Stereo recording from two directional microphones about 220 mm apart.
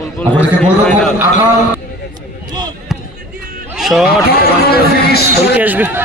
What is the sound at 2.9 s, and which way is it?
Basketball bounce, centre (ahead or behind).